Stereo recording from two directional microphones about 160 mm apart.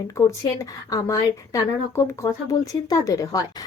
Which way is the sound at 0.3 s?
20° left (ahead or behind).